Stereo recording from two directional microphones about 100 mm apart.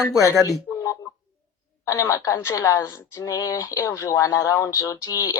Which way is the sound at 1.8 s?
30° left (ahead or behind).